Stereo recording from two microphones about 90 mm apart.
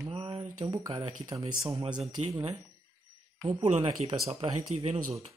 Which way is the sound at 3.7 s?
85° right.